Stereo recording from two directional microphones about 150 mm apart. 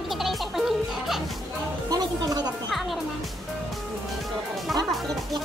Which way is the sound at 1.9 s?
25° right (ahead or behind).